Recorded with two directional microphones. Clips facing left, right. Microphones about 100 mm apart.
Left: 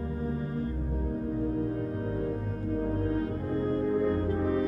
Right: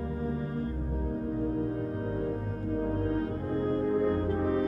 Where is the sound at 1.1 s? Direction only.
40° right (ahead or behind).